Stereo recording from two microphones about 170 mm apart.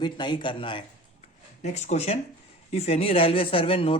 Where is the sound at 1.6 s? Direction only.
40° left (ahead or behind).